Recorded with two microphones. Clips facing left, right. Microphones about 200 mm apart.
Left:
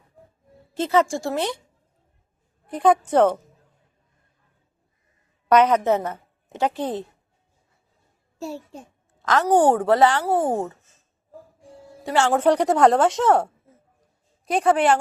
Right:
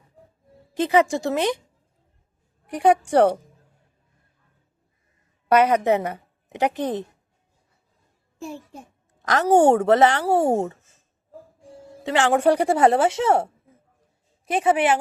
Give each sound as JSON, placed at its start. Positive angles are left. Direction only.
{"t": 0.7, "sound": "speech", "side_deg": -15}
{"t": 2.6, "sound": "a woman's voice", "side_deg": -10}
{"t": 5.5, "sound": "a woman's voice", "side_deg": -10}
{"t": 8.4, "sound": "a child's voice", "side_deg": -15}
{"t": 11.9, "sound": "speech", "side_deg": -20}
{"t": 14.5, "sound": "speech", "side_deg": -5}